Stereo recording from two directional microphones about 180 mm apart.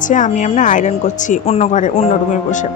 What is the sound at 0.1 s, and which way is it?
Speech, 45° left (ahead or behind).